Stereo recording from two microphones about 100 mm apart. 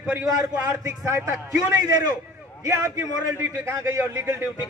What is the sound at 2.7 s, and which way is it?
A man's voice, 30° right (ahead or behind).